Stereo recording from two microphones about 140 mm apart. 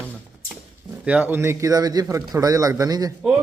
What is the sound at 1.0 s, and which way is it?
A man's voice, 10° right (ahead or behind).